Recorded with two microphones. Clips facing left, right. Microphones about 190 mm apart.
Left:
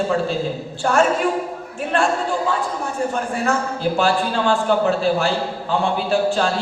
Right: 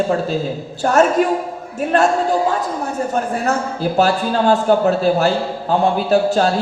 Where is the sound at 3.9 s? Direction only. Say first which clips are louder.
Right 4 dB; 40° right (ahead or behind).